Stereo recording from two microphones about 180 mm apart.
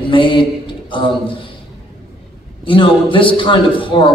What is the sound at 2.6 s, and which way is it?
Speech, 30° left (ahead or behind).